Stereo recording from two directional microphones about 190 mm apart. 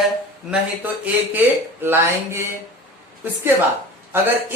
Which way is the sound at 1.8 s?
10° right (ahead or behind).